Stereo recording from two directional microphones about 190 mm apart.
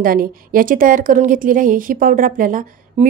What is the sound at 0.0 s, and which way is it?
A woman's voice, 50° right (ahead or behind).